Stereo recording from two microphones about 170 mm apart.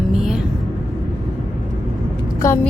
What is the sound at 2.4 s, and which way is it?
Speech, 20° left (ahead or behind).